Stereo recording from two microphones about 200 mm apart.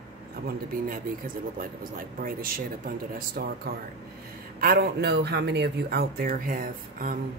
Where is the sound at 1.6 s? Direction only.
45° right (ahead or behind).